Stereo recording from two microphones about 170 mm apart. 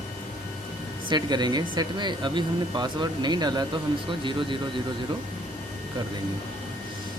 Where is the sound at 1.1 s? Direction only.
25° right (ahead or behind).